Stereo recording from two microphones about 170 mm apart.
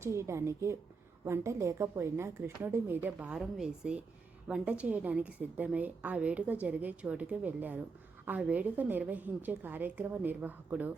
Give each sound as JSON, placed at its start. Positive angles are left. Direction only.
{"t": 0.0, "sound": "a woman's voice", "side_deg": -15}